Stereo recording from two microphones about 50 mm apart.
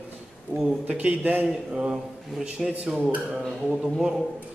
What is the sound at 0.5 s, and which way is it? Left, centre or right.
Speech, right.